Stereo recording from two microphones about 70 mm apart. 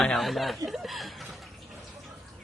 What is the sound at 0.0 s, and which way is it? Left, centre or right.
Speech, centre.